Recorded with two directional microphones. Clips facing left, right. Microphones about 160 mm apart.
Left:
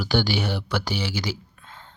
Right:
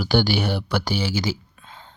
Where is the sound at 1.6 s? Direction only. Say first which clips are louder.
Right 1 dB; 15° right (ahead or behind).